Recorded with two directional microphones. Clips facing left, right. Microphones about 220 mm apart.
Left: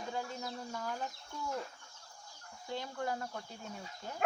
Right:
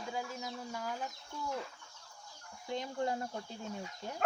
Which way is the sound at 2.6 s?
20° right (ahead or behind).